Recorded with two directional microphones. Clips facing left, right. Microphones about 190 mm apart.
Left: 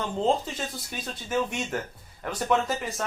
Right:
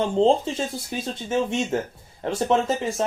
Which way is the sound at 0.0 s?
30° right (ahead or behind).